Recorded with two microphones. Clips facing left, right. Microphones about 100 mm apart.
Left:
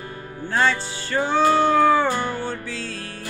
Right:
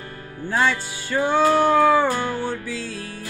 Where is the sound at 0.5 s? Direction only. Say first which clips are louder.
Even; 10° right (ahead or behind).